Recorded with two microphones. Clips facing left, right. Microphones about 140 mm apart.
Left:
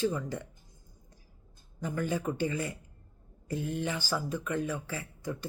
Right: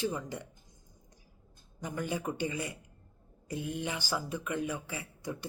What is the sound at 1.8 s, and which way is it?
Speech, 15° right (ahead or behind).